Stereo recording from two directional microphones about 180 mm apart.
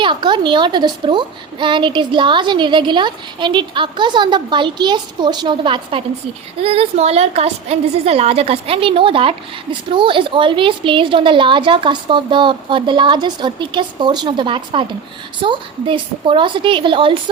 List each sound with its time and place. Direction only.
0.0 s a woman's voice: 25° right (ahead or behind)